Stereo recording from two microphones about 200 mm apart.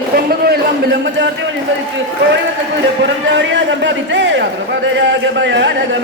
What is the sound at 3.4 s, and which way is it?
A man's voice, 65° right (ahead or behind).